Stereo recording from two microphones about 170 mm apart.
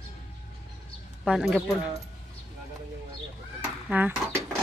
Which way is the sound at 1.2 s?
Centre (ahead or behind).